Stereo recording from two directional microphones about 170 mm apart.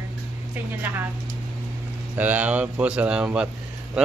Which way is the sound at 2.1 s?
10° right (ahead or behind).